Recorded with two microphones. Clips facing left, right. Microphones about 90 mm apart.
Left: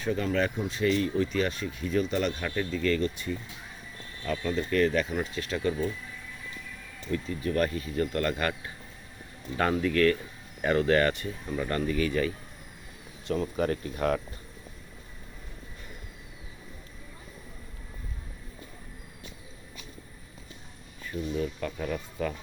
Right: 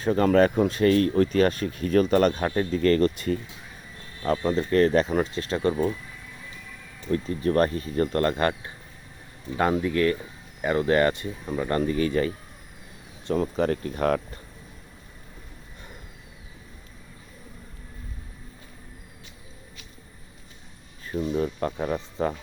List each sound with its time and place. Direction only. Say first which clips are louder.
0.0 s speech: right 8 dB; 50° right (ahead or behind)
2.3 s speech: right 6 dB; 40° right (ahead or behind)
4.2 s speech: right 6 dB; 40° right (ahead or behind)
7.1 s speech: right 6 dB; 40° right (ahead or behind)
9.6 s speech: right 2 dB; 20° right (ahead or behind)
11.8 s speech: right 3 dB; 35° right (ahead or behind)
13.6 s speech: right 4 dB; 50° right (ahead or behind)
21.1 s speech: right 5 dB; 40° right (ahead or behind)